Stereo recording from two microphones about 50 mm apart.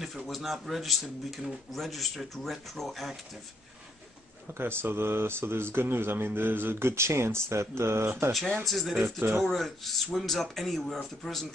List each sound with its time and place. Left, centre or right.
0.3 s speech: centre
4.6 s speech: right
8.6 s speech: centre
9.0 s speech: right
9.4 s speech: centre